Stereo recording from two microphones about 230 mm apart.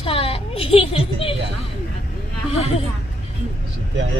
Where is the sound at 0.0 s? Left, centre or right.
Left.